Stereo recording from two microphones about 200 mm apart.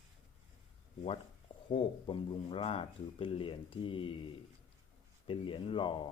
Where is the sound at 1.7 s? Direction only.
25° left (ahead or behind).